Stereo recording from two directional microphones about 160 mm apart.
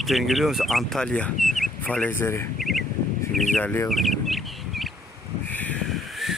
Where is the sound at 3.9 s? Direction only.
Centre (ahead or behind).